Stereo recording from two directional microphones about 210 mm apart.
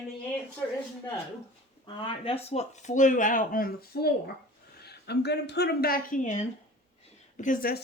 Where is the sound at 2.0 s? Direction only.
25° left (ahead or behind).